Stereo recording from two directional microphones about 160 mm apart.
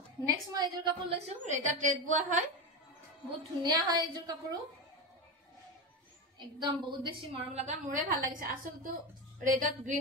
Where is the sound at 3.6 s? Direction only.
25° right (ahead or behind).